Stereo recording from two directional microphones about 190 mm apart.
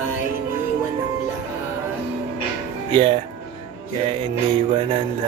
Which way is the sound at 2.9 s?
25° right (ahead or behind).